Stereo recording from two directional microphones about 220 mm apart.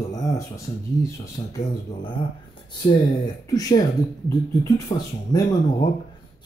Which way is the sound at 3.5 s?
15° left (ahead or behind).